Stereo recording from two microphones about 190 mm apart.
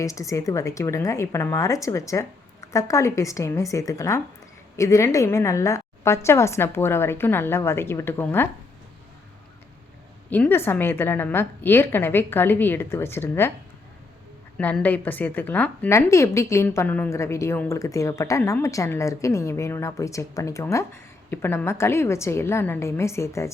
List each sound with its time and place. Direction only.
0.0 s a woman's voice: 15° left (ahead or behind)
10.2 s a woman's voice: 10° left (ahead or behind)
14.6 s a woman's voice: 5° left (ahead or behind)